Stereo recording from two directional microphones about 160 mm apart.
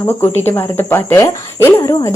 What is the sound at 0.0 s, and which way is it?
Speech, 15° left (ahead or behind).